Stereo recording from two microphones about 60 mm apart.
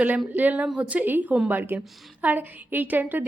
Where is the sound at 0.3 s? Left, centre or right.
Right.